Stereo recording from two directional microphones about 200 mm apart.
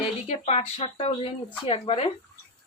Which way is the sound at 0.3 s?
30° left (ahead or behind).